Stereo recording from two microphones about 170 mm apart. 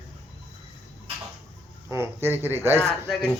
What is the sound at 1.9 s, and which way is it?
Speech, 15° right (ahead or behind).